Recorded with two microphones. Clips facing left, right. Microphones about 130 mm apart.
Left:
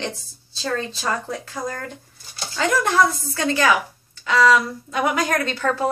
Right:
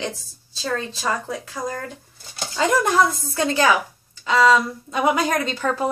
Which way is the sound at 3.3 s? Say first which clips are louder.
Right 1 dB; 25° right (ahead or behind).